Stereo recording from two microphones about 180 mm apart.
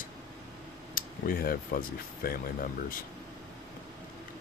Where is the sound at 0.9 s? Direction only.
55° left (ahead or behind).